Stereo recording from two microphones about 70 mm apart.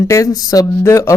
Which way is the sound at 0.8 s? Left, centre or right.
Left.